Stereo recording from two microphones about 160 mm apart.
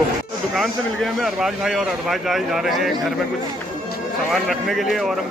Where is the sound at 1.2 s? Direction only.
Centre (ahead or behind).